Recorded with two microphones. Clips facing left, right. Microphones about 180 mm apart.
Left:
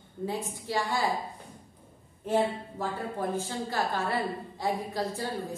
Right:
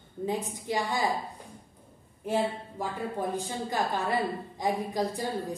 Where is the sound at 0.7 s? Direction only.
20° right (ahead or behind).